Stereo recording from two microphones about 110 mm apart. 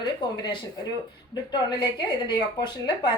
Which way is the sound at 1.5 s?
45° left (ahead or behind).